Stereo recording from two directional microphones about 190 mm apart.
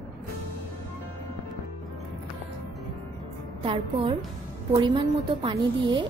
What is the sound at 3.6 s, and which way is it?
A woman's voice, 30° right (ahead or behind).